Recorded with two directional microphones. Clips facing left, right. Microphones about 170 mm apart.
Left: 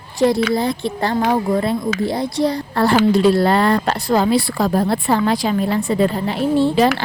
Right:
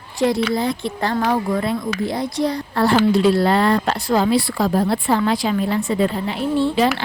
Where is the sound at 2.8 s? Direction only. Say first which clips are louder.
Left 1 dB; 45° left (ahead or behind).